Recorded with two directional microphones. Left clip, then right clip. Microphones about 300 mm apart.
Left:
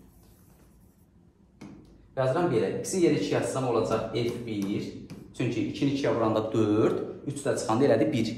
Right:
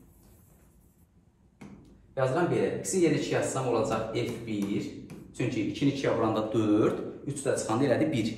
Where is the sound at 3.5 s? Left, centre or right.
Centre.